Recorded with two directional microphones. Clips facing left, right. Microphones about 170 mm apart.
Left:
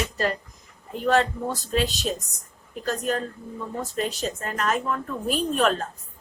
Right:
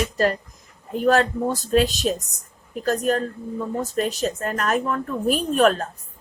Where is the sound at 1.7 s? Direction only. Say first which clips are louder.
Right 6 dB; 50° right (ahead or behind).